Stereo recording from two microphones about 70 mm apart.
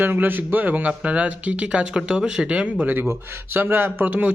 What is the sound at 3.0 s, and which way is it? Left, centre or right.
Speech, right.